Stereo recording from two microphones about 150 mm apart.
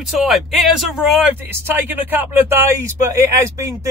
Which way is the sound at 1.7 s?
15° right (ahead or behind).